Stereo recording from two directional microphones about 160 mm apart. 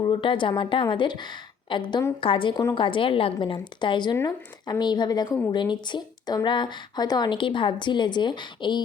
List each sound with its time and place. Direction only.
0.0 s speech: 30° left (ahead or behind)